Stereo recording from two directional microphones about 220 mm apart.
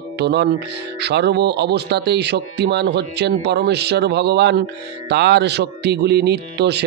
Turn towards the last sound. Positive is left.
turn(degrees=-50)  # may be behind; listen again after turning